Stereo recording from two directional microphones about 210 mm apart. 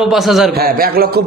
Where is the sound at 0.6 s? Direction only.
45° right (ahead or behind).